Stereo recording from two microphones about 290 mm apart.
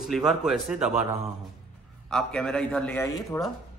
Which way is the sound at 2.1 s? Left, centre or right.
Centre.